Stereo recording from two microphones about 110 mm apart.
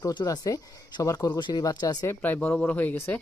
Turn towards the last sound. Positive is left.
turn(degrees=20)  # may be behind; listen again after turning